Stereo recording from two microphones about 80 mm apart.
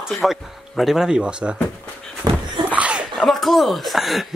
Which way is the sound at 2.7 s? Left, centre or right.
Centre.